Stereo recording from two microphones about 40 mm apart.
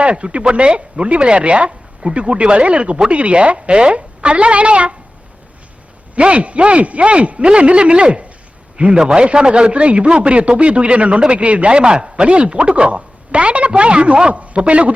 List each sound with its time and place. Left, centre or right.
0.0 s a man's voice: right
6.1 s a man's voice: right